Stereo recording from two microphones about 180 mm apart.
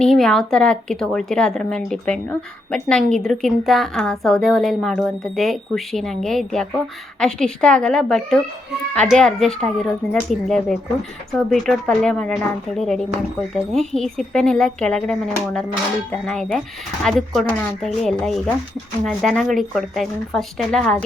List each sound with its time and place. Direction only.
0.0 s a woman's voice: centre (ahead or behind)